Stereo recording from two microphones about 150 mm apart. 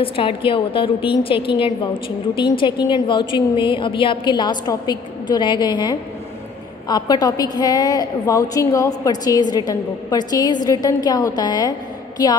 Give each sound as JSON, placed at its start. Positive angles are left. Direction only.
{"t": 0.0, "sound": "a woman's voice", "side_deg": 35}